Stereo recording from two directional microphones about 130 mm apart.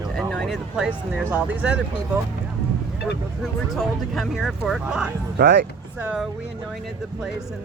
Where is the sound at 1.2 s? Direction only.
15° right (ahead or behind).